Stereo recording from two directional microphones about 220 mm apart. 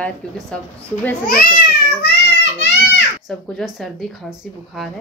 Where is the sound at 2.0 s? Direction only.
50° left (ahead or behind).